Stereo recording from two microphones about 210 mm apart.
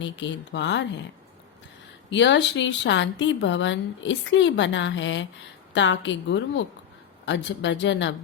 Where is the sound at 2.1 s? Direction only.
55° left (ahead or behind).